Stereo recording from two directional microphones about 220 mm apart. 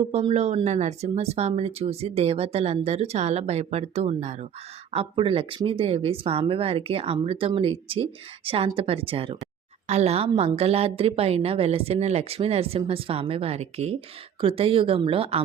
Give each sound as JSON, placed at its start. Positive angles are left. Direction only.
{"t": 0.1, "sound": "speech", "side_deg": -30}